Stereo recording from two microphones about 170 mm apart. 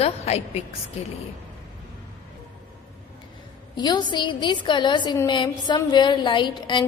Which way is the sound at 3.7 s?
25° left (ahead or behind).